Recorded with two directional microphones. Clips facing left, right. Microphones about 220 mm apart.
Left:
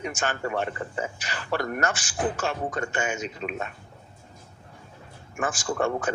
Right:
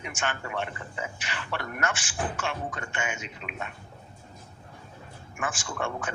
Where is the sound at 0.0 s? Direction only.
40° left (ahead or behind).